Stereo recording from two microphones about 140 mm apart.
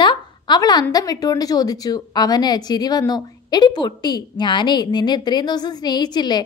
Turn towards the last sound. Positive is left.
turn(degrees=30)  # may be behind; listen again after turning